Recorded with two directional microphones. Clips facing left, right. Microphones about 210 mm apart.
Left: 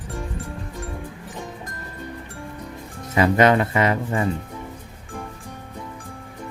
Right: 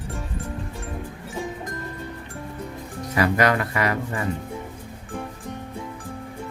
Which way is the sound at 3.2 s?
25° left (ahead or behind).